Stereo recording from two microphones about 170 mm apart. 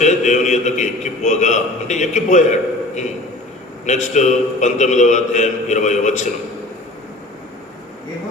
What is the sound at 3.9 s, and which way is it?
A man's voice, 45° left (ahead or behind).